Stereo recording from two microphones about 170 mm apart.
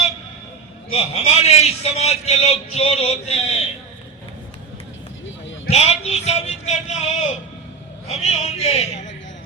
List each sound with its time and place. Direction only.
0.9 s a man's voice: 40° left (ahead or behind)
5.2 s a sound: 90° left
5.7 s a man's voice: 40° left (ahead or behind)